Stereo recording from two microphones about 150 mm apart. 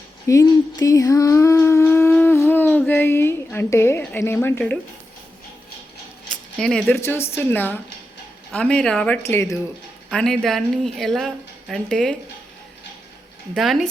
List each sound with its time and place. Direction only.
0.3 s a sound: 20° left (ahead or behind)
2.2 s a woman's voice: 15° left (ahead or behind)
6.6 s speech: 5° left (ahead or behind)
7.0 s speech: 15° left (ahead or behind)
10.1 s speech: 5° left (ahead or behind)
13.6 s speech: centre (ahead or behind)